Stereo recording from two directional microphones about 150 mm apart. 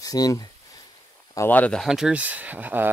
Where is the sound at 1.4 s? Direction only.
10° left (ahead or behind).